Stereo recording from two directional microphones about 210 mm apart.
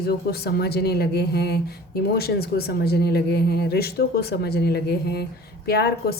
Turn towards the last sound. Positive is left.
turn(degrees=50)  # may be behind; listen again after turning